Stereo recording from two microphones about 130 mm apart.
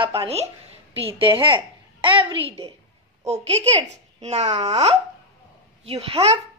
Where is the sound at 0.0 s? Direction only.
45° right (ahead or behind).